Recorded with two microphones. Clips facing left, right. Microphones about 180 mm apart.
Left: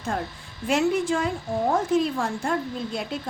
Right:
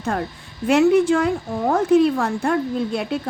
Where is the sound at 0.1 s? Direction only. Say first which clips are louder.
Right 4 dB; 60° right (ahead or behind).